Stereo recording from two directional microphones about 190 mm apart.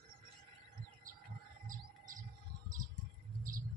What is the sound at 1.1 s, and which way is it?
Bird, 45° right (ahead or behind).